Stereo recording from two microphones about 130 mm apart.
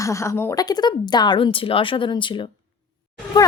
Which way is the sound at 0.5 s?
30° left (ahead or behind).